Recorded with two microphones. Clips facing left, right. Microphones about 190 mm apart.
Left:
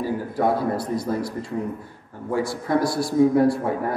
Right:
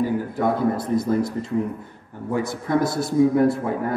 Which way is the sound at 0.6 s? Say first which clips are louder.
Right 3 dB; 20° right (ahead or behind).